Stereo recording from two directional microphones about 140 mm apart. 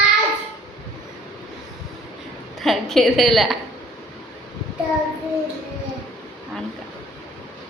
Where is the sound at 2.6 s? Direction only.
Centre (ahead or behind).